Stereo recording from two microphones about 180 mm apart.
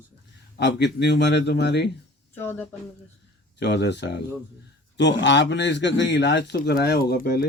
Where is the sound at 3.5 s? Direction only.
70° left (ahead or behind).